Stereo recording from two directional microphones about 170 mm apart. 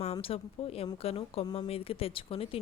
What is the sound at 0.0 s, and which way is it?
Speech, 35° left (ahead or behind).